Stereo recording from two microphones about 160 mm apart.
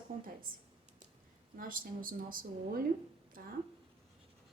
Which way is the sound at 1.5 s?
60° right (ahead or behind).